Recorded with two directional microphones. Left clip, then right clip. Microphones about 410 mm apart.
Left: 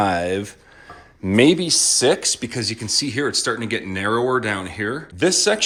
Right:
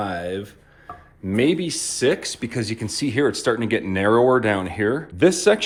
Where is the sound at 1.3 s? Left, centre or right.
Centre.